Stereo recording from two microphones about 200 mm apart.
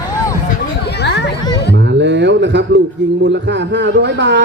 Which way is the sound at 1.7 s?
60° right (ahead or behind).